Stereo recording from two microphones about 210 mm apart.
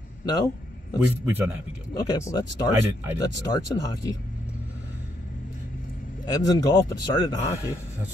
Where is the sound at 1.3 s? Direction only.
10° right (ahead or behind).